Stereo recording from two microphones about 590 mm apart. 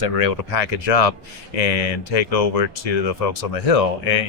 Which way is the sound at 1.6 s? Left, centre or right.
Left.